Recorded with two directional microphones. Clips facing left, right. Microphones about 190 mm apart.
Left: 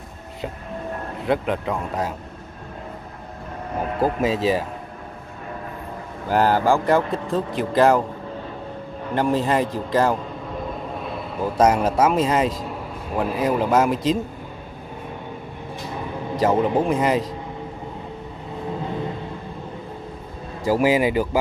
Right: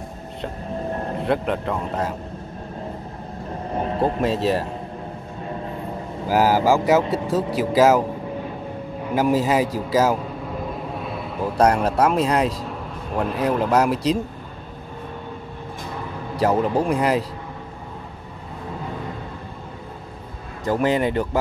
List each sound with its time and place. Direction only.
1.2 s a man's voice: centre (ahead or behind)
3.7 s speech: 30° right (ahead or behind)
4.2 s a man's voice: centre (ahead or behind)
6.2 s a man's voice: 5° right (ahead or behind)
9.1 s a man's voice: 5° right (ahead or behind)
16.3 s a man's voice: centre (ahead or behind)
20.6 s a man's voice: 5° left (ahead or behind)